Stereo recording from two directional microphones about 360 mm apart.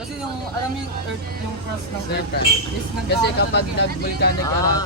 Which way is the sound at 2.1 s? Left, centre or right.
Left.